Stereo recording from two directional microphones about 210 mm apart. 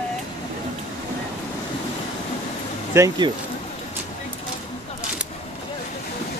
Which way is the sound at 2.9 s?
15° right (ahead or behind).